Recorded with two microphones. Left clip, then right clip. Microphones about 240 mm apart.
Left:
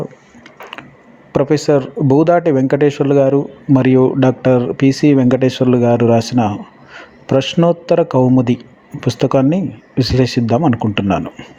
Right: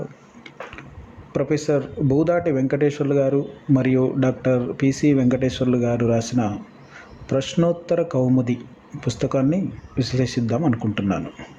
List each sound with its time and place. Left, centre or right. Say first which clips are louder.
1.3 s speech: left 8 dB; left